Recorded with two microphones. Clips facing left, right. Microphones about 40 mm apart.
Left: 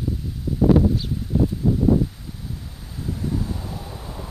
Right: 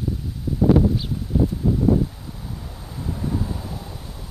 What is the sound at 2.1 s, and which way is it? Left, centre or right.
Vehicle, centre.